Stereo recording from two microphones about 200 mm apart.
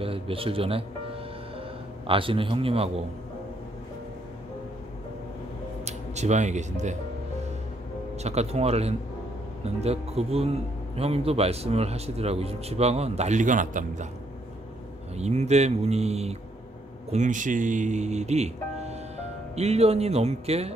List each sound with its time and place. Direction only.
0.0 s a man's voice: 30° right (ahead or behind)
2.0 s a man's voice: 25° right (ahead or behind)
5.9 s speech: 35° right (ahead or behind)
8.2 s a man's voice: 30° right (ahead or behind)
15.1 s a man's voice: 35° right (ahead or behind)